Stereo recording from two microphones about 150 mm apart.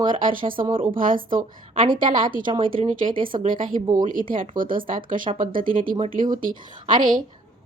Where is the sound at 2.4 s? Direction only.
30° right (ahead or behind).